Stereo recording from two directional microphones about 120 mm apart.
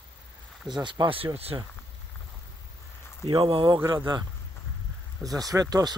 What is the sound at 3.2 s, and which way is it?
Speech, 45° right (ahead or behind).